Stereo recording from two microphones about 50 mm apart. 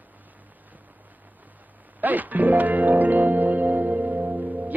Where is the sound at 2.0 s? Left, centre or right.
Right.